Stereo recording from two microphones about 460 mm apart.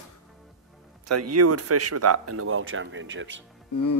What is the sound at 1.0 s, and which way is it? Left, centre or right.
Speech, right.